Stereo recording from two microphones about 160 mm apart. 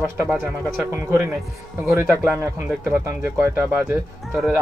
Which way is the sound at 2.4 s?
15° right (ahead or behind).